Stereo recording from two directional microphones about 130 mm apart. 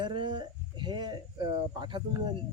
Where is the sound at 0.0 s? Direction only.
35° right (ahead or behind).